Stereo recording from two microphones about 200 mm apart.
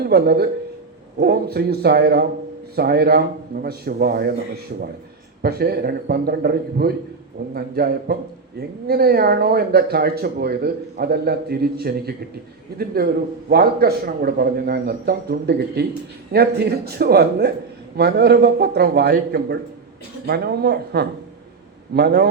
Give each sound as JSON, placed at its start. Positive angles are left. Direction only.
{"t": 0.0, "sound": "speech", "side_deg": -55}
{"t": 5.4, "sound": "a man's voice", "side_deg": -50}